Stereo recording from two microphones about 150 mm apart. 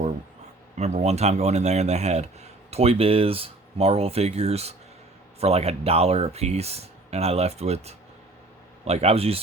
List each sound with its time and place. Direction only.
0.8 s speech: 50° right (ahead or behind)